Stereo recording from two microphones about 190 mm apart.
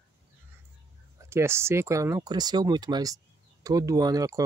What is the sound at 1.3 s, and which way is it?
Speech, 15° right (ahead or behind).